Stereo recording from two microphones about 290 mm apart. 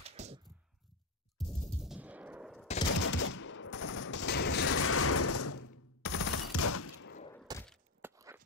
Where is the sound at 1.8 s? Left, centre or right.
Centre.